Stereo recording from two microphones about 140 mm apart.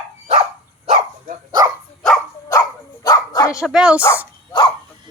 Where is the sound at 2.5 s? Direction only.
25° left (ahead or behind).